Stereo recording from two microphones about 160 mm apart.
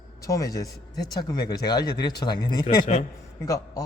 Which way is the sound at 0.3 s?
20° left (ahead or behind).